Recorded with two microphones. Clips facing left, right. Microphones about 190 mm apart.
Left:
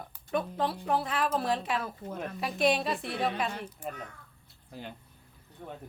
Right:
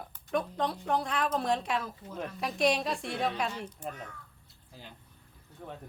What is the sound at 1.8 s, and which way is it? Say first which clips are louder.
Speech: left 4 dB; 55° left (ahead or behind).